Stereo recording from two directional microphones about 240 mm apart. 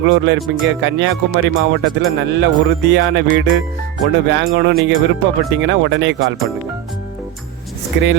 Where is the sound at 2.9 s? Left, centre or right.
Right.